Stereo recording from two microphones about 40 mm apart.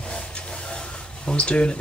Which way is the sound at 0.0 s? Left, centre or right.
Left.